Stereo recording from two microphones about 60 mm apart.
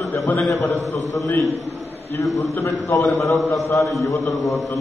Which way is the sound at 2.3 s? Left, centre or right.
Left.